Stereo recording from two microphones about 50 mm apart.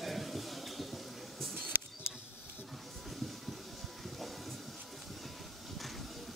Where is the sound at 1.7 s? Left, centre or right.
Right.